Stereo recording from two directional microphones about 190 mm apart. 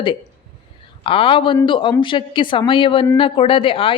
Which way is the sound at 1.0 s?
30° left (ahead or behind).